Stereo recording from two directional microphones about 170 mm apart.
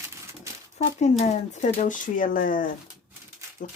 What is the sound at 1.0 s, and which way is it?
Speech, 40° left (ahead or behind).